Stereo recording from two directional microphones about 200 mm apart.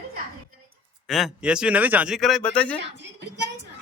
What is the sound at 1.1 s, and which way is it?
A man's voice, centre (ahead or behind).